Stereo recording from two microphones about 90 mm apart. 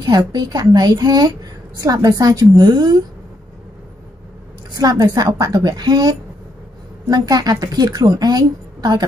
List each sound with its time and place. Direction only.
0.0 s a woman's voice: 50° right (ahead or behind)
4.7 s a woman's voice: 45° right (ahead or behind)